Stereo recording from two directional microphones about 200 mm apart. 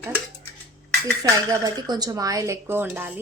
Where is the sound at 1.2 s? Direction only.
20° right (ahead or behind).